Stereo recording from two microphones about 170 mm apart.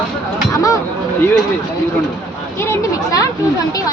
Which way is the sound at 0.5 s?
20° left (ahead or behind).